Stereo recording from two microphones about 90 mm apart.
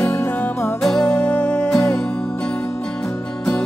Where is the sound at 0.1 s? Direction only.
25° left (ahead or behind).